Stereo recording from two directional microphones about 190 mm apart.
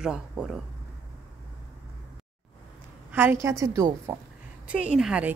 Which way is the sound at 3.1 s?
10° right (ahead or behind).